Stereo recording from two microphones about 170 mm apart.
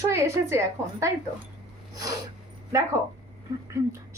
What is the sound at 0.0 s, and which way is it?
A woman's voice, 15° right (ahead or behind).